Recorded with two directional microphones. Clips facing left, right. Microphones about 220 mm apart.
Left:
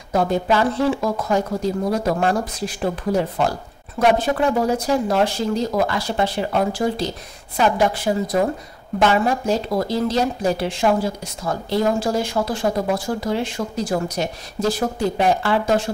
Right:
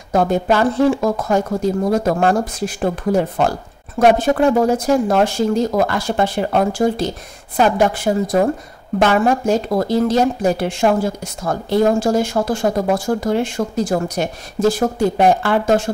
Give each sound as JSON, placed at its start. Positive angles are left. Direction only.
{"t": 0.1, "sound": "speech", "side_deg": -50}